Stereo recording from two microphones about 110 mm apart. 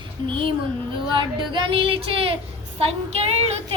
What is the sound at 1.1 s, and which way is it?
Speech, 45° right (ahead or behind).